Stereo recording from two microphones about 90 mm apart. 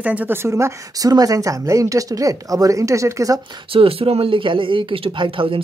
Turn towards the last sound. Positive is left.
turn(degrees=-75)  # may be behind; listen again after turning